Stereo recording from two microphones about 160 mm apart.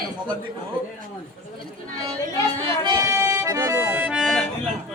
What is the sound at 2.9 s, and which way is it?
Accordion, 20° right (ahead or behind).